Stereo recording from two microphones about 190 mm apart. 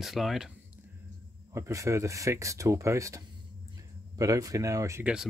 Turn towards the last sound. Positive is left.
turn(degrees=-10)  # may be behind; listen again after turning